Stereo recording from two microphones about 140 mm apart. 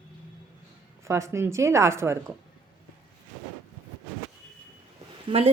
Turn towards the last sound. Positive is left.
turn(degrees=-35)  # may be behind; listen again after turning